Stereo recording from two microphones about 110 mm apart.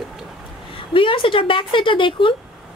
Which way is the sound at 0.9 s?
55° left (ahead or behind).